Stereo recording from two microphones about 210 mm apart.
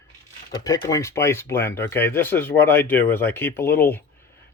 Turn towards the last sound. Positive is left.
turn(degrees=10)  # may be behind; listen again after turning